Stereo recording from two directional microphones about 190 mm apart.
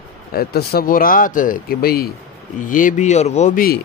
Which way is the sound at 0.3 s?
55° left (ahead or behind).